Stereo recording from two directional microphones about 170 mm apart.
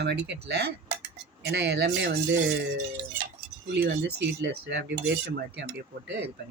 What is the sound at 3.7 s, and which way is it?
Speech, 75° right (ahead or behind).